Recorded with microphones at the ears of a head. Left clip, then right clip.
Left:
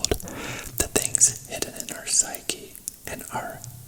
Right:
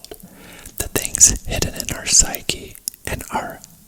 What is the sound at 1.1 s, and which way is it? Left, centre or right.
Whispering, right.